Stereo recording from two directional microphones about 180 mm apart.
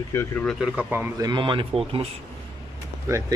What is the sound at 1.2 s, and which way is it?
Speech, 25° right (ahead or behind).